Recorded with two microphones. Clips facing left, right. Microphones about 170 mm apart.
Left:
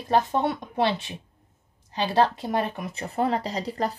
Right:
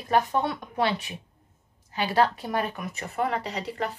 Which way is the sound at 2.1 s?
25° left (ahead or behind).